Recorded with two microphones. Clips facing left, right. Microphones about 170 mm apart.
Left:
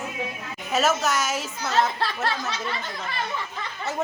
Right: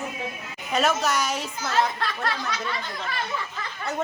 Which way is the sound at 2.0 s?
30° left (ahead or behind).